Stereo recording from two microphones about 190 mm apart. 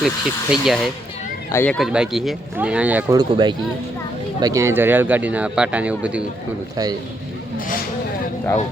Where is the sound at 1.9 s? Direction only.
5° right (ahead or behind).